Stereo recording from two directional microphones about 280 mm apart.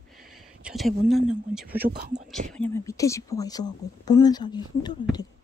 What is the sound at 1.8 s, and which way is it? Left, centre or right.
Speech, right.